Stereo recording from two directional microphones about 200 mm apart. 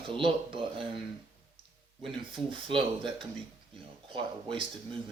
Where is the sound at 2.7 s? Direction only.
25° right (ahead or behind).